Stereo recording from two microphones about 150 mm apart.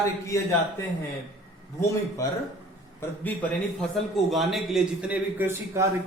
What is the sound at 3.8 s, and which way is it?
A man's voice, centre (ahead or behind).